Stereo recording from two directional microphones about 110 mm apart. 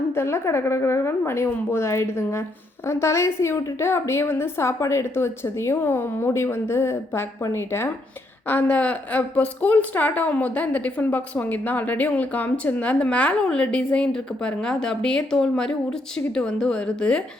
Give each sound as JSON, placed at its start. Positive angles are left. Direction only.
{"t": 0.2, "sound": "a woman's voice", "side_deg": 25}